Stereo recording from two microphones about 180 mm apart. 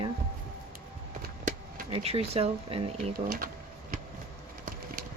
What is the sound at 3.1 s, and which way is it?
Speech, 55° right (ahead or behind).